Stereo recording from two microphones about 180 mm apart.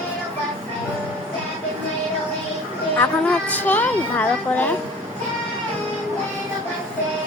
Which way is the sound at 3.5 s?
10° left (ahead or behind).